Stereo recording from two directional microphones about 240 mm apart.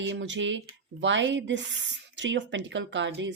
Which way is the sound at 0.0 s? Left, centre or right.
Right.